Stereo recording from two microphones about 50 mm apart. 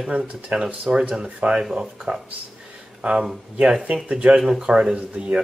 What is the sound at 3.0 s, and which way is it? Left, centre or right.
Speech, centre.